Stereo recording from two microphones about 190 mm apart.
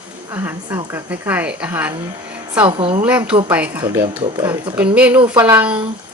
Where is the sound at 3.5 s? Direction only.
10° right (ahead or behind).